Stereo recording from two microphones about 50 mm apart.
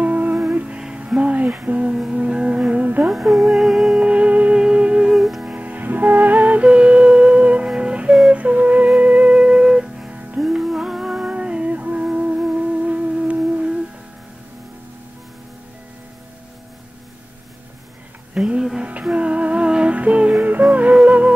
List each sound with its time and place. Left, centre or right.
0.0 s music: right
0.7 s music: centre
3.1 s music: centre
4.0 s music: right
5.1 s music: centre
5.4 s music: right
8.1 s a sound: centre
8.4 s music: right
10.4 s music: centre
18.3 s music: centre